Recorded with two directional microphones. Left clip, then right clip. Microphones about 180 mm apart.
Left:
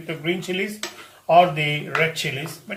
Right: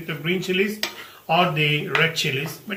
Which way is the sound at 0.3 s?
40° left (ahead or behind).